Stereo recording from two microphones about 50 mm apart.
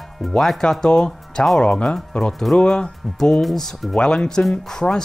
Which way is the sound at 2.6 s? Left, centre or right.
Centre.